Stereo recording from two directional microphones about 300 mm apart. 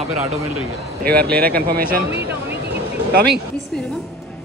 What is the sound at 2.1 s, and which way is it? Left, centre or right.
Speech, centre.